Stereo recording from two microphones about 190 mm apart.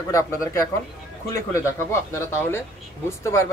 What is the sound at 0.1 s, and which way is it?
A man's voice, 15° left (ahead or behind).